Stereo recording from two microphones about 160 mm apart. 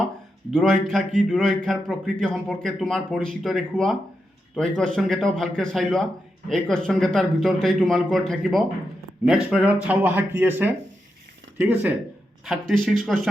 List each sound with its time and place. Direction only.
0.5 s a man's voice: 5° left (ahead or behind)
12.5 s a man's voice: centre (ahead or behind)